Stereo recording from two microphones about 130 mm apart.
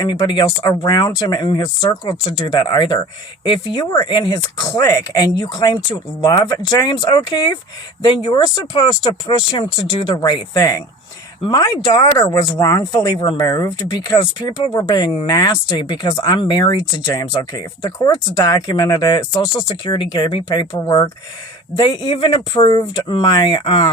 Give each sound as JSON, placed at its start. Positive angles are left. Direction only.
{"t": 0.0, "sound": "speech", "side_deg": 35}
{"t": 13.0, "sound": "speech", "side_deg": 35}
{"t": 13.4, "sound": "speech", "side_deg": 25}
{"t": 21.8, "sound": "speech", "side_deg": 40}